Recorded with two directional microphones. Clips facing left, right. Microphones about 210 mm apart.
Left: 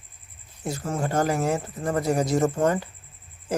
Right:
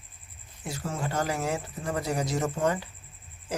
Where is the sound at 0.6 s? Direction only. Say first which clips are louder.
Left 5 dB; 45° left (ahead or behind).